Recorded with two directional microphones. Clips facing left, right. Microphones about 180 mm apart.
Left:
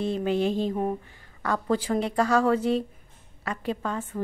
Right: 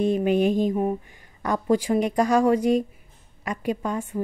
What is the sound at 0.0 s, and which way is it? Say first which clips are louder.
Speech: right 5 dB; 15° right (ahead or behind).